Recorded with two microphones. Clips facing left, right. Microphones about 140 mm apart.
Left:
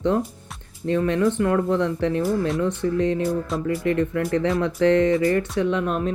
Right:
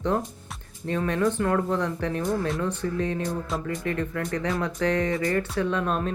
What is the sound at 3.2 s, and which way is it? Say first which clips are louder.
Music: left 5 dB; 5° left (ahead or behind).